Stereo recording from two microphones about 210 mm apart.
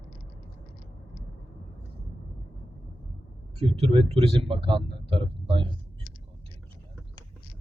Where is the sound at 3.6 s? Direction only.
25° right (ahead or behind).